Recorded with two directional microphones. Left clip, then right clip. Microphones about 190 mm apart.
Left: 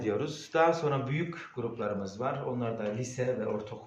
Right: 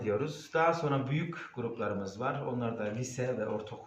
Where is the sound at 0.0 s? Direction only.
40° left (ahead or behind).